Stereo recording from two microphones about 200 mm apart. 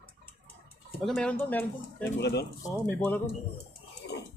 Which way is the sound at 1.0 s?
Centre (ahead or behind).